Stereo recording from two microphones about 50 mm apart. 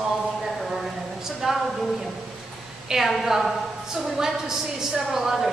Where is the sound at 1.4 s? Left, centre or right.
Centre.